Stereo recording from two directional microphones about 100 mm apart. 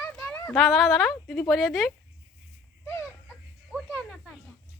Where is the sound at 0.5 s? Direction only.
Centre (ahead or behind).